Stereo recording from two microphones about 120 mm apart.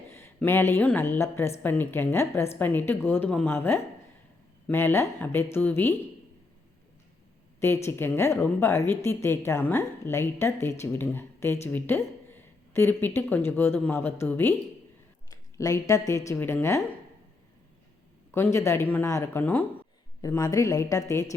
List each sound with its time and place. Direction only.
0.1 s a woman's voice: 20° left (ahead or behind)
7.9 s a woman's voice: 20° left (ahead or behind)
18.3 s a woman's voice: 20° left (ahead or behind)
20.2 s a woman's voice: 30° left (ahead or behind)